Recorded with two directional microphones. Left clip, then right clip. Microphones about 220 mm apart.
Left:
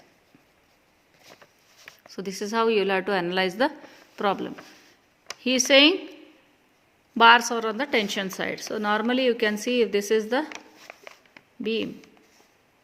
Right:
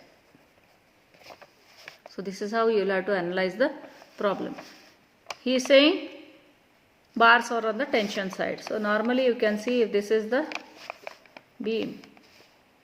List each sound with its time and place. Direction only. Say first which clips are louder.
2.1 s a woman's voice: left 1 dB; 45° left (ahead or behind)
7.2 s a woman's voice: left 3 dB; 45° left (ahead or behind)
11.6 s a woman's voice: left 1 dB; 45° left (ahead or behind)